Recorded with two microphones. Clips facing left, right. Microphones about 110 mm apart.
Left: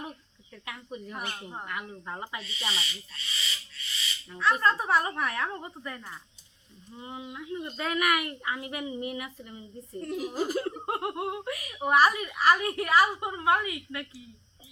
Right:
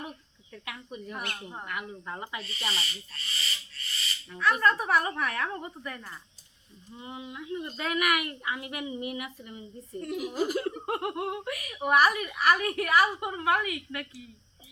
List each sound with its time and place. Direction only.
0.6 s a woman's voice: 30° left (ahead or behind)
2.6 s owl: centre (ahead or behind)
2.8 s speech: 40° right (ahead or behind)
4.3 s a woman's voice: 30° left (ahead or behind)